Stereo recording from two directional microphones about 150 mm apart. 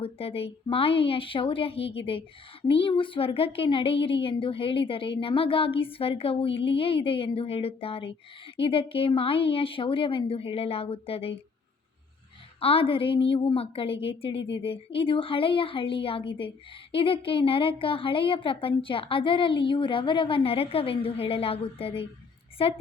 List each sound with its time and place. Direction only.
0.0 s a woman's voice: 40° left (ahead or behind)
12.5 s a woman's voice: 40° left (ahead or behind)